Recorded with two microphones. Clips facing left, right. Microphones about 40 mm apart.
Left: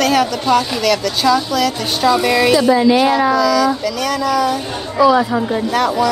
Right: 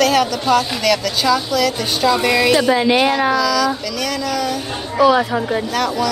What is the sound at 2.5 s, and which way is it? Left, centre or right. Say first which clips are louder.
Speech: left 2 dB; right.